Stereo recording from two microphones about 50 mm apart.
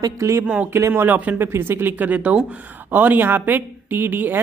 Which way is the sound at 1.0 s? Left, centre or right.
Right.